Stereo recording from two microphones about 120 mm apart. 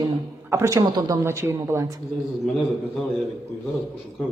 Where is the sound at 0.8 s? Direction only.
35° right (ahead or behind).